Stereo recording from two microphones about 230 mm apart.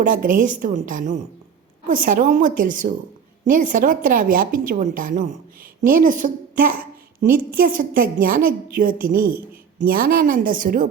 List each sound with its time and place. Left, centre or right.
0.0 s a woman's voice: right